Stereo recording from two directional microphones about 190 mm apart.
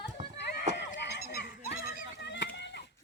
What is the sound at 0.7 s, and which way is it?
Goat, 40° right (ahead or behind).